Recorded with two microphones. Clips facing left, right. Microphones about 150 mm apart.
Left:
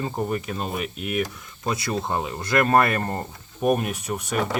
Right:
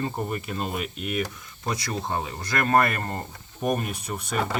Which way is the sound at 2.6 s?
35° left (ahead or behind).